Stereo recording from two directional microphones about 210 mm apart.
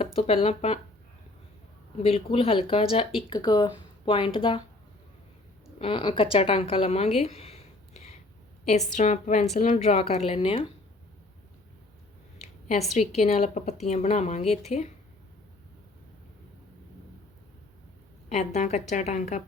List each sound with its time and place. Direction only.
0.0 s speech: 25° left (ahead or behind)
2.0 s speech: 25° left (ahead or behind)
5.8 s a woman's voice: 25° left (ahead or behind)
12.9 s a woman's voice: 30° left (ahead or behind)
18.3 s a woman's voice: 35° left (ahead or behind)